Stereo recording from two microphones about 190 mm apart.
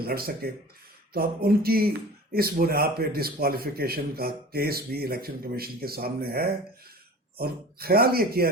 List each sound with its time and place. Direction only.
0.0 s speech: 50° right (ahead or behind)